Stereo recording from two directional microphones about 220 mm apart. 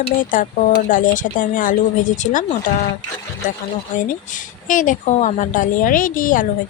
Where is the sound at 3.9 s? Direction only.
35° left (ahead or behind).